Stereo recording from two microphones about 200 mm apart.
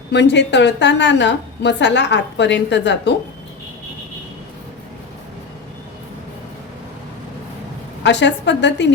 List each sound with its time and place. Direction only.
0.1 s a woman's voice: 60° left (ahead or behind)
8.0 s a woman's voice: 60° left (ahead or behind)